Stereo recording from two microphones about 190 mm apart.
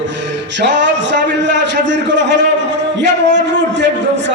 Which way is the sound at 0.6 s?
70° right (ahead or behind).